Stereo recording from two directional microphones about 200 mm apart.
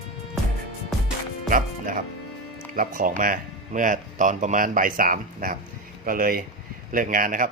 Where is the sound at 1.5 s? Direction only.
40° right (ahead or behind).